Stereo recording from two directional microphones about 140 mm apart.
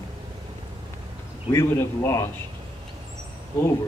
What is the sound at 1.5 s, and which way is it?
Speech, 15° left (ahead or behind).